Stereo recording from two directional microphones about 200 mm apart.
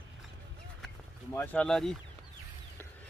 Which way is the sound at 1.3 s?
10° left (ahead or behind).